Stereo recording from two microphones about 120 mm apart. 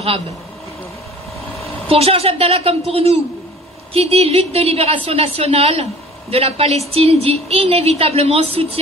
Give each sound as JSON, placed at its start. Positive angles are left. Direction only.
{"t": 1.9, "sound": "a woman's voice", "side_deg": -55}